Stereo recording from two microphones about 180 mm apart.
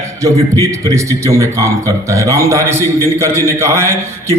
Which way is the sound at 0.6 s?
20° right (ahead or behind).